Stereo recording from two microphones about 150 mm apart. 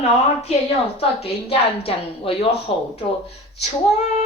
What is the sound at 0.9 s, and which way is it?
A woman's voice, 40° left (ahead or behind).